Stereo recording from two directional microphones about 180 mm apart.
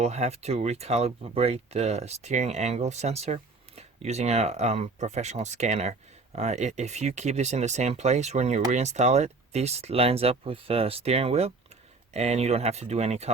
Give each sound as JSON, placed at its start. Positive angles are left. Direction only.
{"t": 0.0, "sound": "speech", "side_deg": -35}